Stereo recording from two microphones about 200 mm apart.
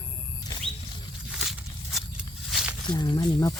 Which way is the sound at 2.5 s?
Centre (ahead or behind).